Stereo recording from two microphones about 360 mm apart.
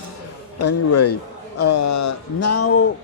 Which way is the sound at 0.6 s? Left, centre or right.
Left.